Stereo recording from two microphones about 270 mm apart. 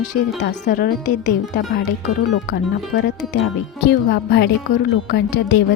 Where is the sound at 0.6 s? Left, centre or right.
Left.